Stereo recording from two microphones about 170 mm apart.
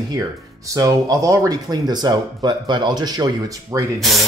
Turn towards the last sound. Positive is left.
turn(degrees=0)  # may be behind; listen again after turning